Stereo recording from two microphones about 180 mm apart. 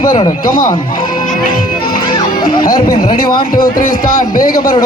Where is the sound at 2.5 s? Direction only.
25° left (ahead or behind).